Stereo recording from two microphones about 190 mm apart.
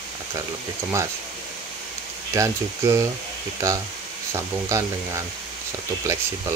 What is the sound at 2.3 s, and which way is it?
Speech, 15° right (ahead or behind).